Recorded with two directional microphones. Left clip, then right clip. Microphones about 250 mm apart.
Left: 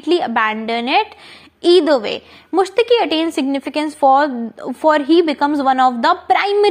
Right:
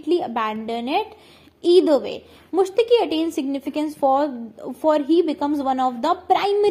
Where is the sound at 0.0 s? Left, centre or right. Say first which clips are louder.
Left 6 dB; left.